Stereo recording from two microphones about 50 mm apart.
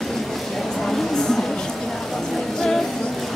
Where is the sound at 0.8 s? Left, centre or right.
Centre.